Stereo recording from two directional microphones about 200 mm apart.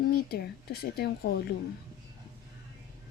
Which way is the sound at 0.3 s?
50° left (ahead or behind).